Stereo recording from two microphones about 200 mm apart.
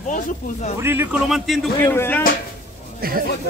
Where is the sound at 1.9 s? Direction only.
10° left (ahead or behind).